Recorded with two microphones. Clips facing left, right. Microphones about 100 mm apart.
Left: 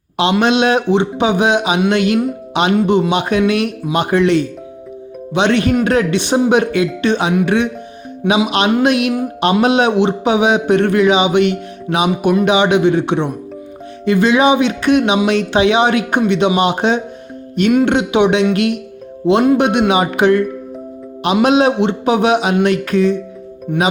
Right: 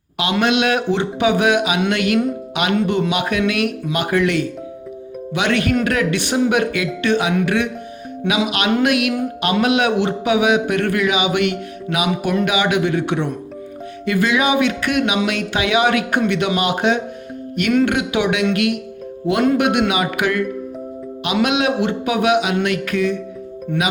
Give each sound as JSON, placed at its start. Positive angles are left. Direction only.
{"t": 0.2, "sound": "a man's voice", "side_deg": 25}
{"t": 21.4, "sound": "a man's voice", "side_deg": 35}